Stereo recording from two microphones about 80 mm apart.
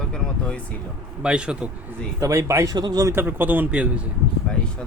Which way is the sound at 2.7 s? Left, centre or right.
Right.